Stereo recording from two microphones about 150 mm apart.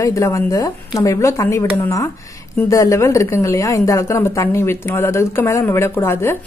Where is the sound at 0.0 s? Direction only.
20° left (ahead or behind).